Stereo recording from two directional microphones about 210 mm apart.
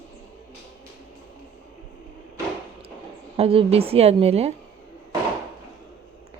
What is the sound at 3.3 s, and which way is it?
Speech, 30° right (ahead or behind).